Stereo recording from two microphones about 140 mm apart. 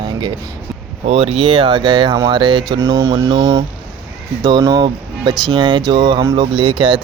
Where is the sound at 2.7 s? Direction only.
25° right (ahead or behind).